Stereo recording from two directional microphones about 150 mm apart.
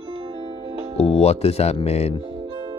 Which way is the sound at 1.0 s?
45° left (ahead or behind).